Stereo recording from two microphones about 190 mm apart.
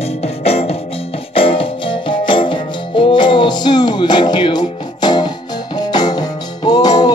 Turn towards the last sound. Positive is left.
turn(degrees=20)  # may be behind; listen again after turning